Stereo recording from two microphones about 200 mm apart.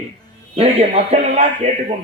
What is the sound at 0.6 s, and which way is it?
Speech, 30° right (ahead or behind).